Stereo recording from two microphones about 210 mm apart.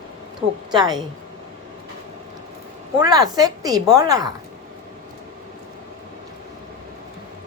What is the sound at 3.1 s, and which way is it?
Speech, 20° right (ahead or behind).